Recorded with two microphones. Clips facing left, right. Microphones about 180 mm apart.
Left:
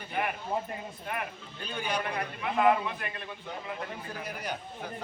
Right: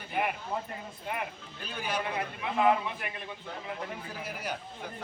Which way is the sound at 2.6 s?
15° right (ahead or behind).